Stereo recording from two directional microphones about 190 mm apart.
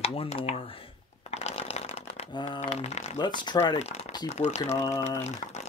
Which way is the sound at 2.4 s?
35° left (ahead or behind).